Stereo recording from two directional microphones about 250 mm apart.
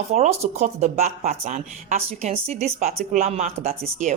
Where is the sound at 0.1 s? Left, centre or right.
Right.